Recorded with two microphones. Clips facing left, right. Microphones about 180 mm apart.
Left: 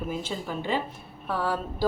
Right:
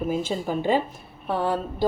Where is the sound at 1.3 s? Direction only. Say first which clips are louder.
Right 4 dB; 20° right (ahead or behind).